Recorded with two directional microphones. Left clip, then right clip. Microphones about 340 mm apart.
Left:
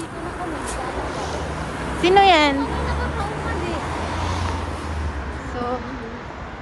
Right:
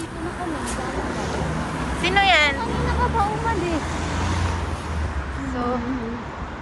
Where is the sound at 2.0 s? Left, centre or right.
Centre.